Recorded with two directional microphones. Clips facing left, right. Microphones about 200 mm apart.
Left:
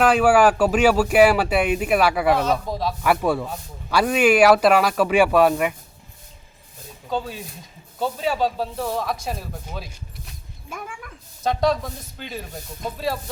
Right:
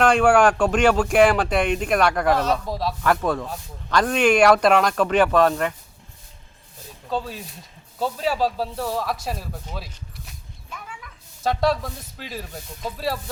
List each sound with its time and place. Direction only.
0.0 s speech: 5° left (ahead or behind)
3.0 s speech: 10° left (ahead or behind)
7.1 s speech: centre (ahead or behind)
10.7 s a sound: 50° left (ahead or behind)
11.4 s speech: centre (ahead or behind)